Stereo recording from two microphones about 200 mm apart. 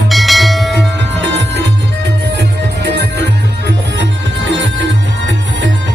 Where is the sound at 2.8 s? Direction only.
60° right (ahead or behind).